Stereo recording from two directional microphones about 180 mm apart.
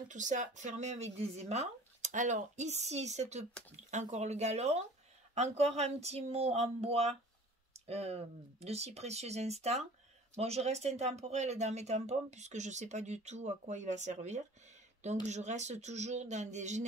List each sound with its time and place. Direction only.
0.1 s speech: 45° right (ahead or behind)